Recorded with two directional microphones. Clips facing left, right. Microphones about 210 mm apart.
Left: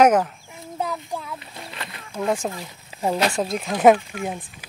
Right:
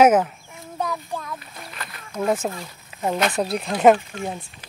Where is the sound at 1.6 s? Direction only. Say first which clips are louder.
Left 1 dB; 25° left (ahead or behind).